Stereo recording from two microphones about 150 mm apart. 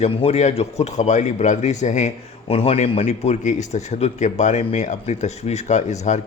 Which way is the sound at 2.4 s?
40° left (ahead or behind).